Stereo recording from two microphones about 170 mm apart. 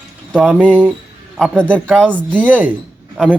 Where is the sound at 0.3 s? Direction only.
5° left (ahead or behind).